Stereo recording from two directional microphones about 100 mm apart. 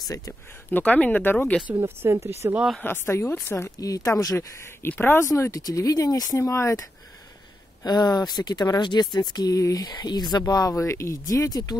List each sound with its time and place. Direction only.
0.7 s speech: 15° left (ahead or behind)
1.8 s speech: 30° right (ahead or behind)
2.8 s speech: 25° left (ahead or behind)
4.8 s speech: 20° left (ahead or behind)
7.8 s speech: 40° left (ahead or behind)
10.4 s speech: 35° left (ahead or behind)